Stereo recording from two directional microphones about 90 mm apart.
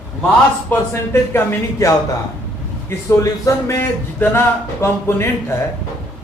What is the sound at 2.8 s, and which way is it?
A man's voice, 30° left (ahead or behind).